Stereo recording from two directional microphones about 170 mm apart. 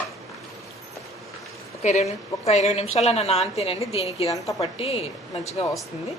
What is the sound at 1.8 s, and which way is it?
A woman's voice, 40° left (ahead or behind).